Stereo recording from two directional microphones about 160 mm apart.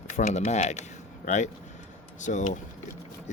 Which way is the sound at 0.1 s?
45° left (ahead or behind).